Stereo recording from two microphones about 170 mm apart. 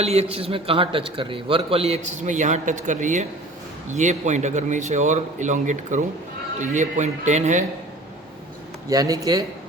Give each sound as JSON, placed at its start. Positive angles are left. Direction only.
{"t": 0.0, "sound": "a man's voice", "side_deg": -40}
{"t": 8.9, "sound": "speech", "side_deg": -20}